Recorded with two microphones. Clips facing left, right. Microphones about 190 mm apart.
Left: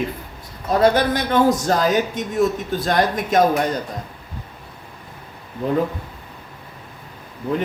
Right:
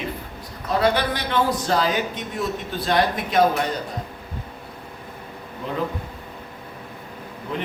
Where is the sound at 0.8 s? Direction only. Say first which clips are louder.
Left 5 dB; 45° left (ahead or behind).